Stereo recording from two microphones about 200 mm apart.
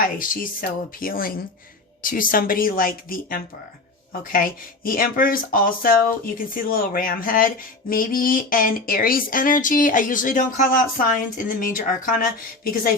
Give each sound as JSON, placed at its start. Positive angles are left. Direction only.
{"t": 0.0, "sound": "speech", "side_deg": 45}